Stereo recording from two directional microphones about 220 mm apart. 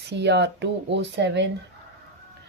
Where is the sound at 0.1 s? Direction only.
50° right (ahead or behind).